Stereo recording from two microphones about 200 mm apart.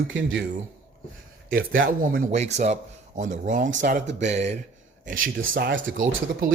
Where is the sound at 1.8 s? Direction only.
45° right (ahead or behind).